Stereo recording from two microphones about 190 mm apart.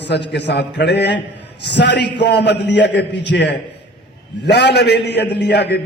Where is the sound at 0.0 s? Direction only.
65° left (ahead or behind).